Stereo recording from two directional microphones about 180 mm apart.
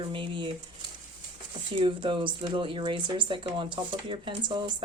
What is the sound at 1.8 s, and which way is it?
Speech, 30° right (ahead or behind).